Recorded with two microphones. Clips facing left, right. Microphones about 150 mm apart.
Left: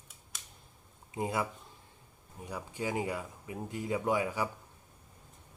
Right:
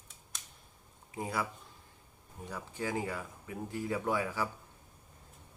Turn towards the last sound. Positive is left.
turn(degrees=20)  # may be behind; listen again after turning